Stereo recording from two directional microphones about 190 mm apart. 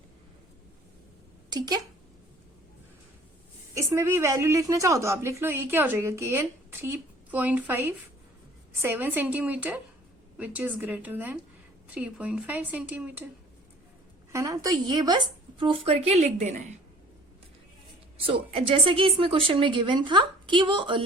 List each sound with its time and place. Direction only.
1.5 s a woman's voice: 20° right (ahead or behind)
3.8 s a woman's voice: 15° right (ahead or behind)
14.3 s a woman's voice: 15° right (ahead or behind); by 16.7 s 35° right (ahead or behind)
18.2 s a woman's voice: 30° right (ahead or behind)